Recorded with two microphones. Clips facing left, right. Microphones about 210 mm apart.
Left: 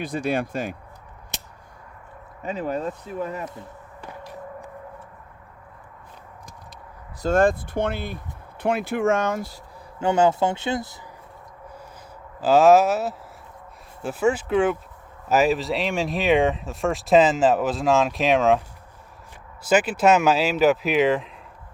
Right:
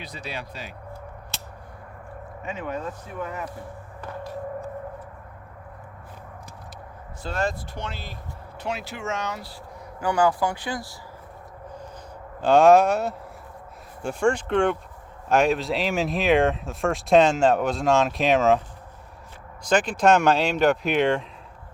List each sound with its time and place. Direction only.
0.0 s speech: 50° left (ahead or behind)
2.4 s speech: 35° left (ahead or behind)
7.2 s speech: 50° left (ahead or behind)
10.0 s speech: 25° left (ahead or behind)
12.4 s speech: 5° left (ahead or behind)
19.6 s speech: 5° left (ahead or behind)